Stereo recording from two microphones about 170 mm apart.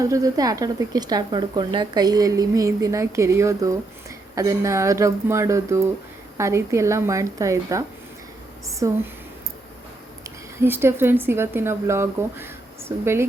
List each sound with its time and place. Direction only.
0.0 s a woman's voice: 20° right (ahead or behind)
10.2 s speech: 15° right (ahead or behind)